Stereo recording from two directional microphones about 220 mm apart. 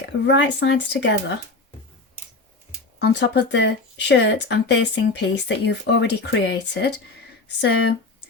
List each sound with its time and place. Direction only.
0.0 s speech: 55° left (ahead or behind)
3.0 s speech: 50° left (ahead or behind)